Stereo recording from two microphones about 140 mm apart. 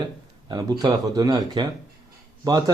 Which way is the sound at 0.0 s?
30° right (ahead or behind).